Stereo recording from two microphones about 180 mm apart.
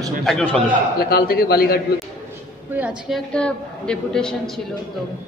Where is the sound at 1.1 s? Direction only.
60° left (ahead or behind).